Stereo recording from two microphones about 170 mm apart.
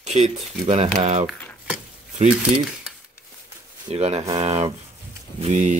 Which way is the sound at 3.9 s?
40° right (ahead or behind).